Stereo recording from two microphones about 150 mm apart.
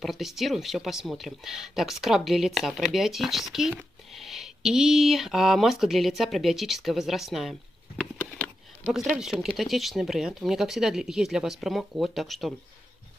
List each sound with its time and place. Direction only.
0.0 s speech: centre (ahead or behind)
8.9 s speech: 5° right (ahead or behind)